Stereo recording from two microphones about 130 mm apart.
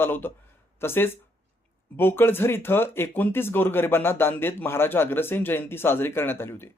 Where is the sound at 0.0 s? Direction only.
15° left (ahead or behind).